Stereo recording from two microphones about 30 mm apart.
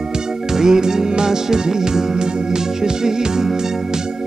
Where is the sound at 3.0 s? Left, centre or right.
Centre.